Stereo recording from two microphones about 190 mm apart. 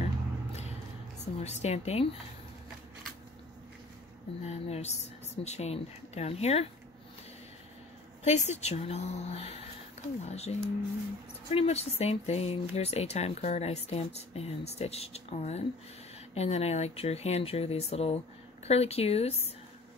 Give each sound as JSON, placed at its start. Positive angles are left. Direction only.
{"t": 1.2, "sound": "speech", "side_deg": 35}
{"t": 4.4, "sound": "speech", "side_deg": 35}
{"t": 8.2, "sound": "speech", "side_deg": 35}